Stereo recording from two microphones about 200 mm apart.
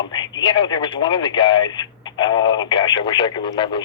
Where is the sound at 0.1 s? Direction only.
20° left (ahead or behind).